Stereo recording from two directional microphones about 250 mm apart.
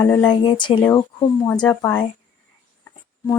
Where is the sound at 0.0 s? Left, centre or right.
Centre.